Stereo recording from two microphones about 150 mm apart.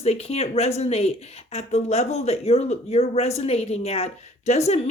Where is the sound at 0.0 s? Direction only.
45° left (ahead or behind).